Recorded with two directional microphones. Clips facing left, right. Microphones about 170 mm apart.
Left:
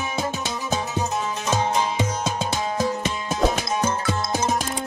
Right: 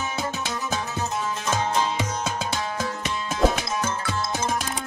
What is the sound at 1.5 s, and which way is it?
Music, 20° left (ahead or behind).